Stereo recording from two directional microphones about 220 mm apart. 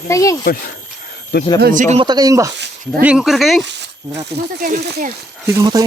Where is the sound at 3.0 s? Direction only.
5° right (ahead or behind).